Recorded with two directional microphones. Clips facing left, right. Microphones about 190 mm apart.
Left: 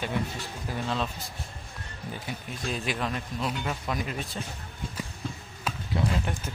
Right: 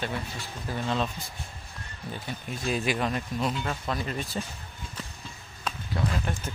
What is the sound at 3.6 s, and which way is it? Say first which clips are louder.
Speech: even; 10° left (ahead or behind).